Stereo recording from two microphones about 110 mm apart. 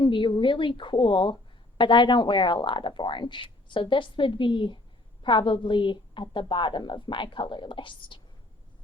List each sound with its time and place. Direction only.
0.0 s speech: 45° left (ahead or behind)